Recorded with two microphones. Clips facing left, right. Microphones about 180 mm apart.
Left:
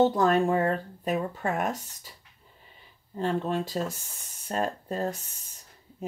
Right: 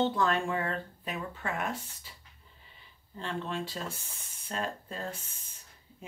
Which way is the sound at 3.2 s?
45° left (ahead or behind).